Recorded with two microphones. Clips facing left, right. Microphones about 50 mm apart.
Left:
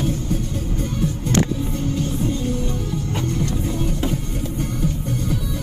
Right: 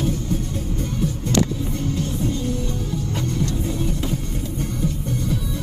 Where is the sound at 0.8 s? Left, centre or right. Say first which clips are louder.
Left 1 dB; left.